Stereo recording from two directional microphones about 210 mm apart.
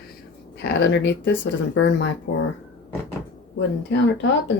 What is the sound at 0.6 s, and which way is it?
Speech, 55° left (ahead or behind).